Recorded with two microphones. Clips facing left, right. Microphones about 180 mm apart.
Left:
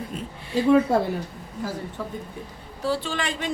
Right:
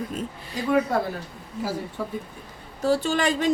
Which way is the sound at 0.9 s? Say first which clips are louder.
Left 3 dB; 30° left (ahead or behind).